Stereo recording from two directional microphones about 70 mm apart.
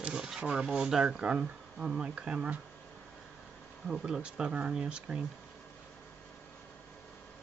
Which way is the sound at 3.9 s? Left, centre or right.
Centre.